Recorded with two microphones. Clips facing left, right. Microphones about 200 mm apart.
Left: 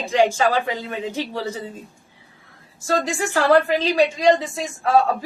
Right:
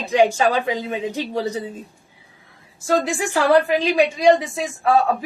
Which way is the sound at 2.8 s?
15° right (ahead or behind).